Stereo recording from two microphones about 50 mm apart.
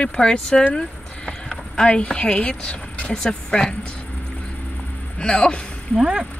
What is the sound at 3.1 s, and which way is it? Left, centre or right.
Speech, centre.